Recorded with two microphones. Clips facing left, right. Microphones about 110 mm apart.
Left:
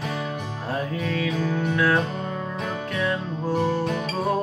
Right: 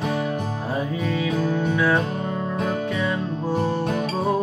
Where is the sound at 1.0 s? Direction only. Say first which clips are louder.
Right 3 dB; 10° right (ahead or behind).